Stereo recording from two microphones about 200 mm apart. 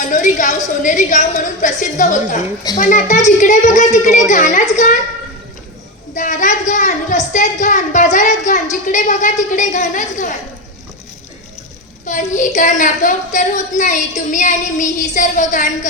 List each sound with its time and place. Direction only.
0.0 s speech: 40° left (ahead or behind)
6.1 s speech: 40° left (ahead or behind)
12.0 s speech: 40° left (ahead or behind)